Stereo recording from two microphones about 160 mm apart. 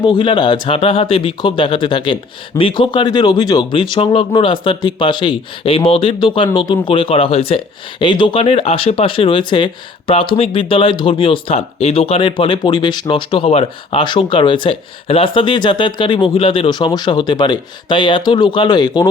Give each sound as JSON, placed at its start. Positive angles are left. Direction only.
{"t": 0.0, "sound": "speech", "side_deg": 30}